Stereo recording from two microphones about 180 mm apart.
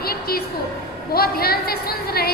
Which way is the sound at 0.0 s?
55° left (ahead or behind).